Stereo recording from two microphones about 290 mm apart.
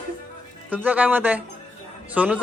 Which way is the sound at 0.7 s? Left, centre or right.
Centre.